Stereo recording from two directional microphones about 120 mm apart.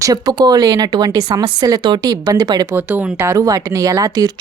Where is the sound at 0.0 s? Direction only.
30° right (ahead or behind).